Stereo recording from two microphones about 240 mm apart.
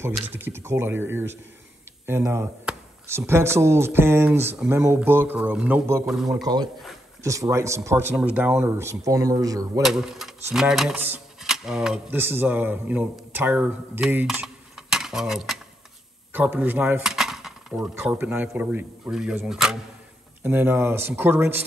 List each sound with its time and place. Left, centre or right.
0.0 s speech: centre
6.4 s speech: centre
9.8 s speech: centre
16.3 s cutlery: centre
17.8 s speech: centre